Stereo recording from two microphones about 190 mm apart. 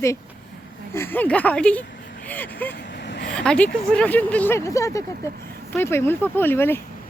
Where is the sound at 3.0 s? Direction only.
60° left (ahead or behind).